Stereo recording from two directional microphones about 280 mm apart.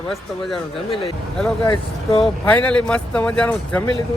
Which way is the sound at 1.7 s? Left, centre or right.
Centre.